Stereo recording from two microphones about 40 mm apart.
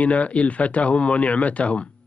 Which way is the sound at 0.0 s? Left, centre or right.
Left.